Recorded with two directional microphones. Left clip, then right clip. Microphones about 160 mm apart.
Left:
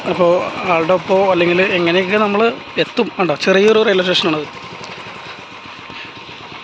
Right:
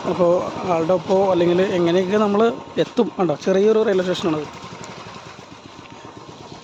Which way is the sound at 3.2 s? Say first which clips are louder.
Left 7 dB; 5° right (ahead or behind).